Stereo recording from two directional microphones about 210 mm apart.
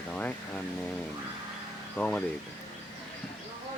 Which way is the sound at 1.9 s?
5° left (ahead or behind).